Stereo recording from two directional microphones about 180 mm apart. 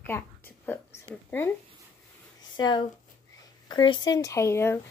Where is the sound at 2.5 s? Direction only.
25° left (ahead or behind).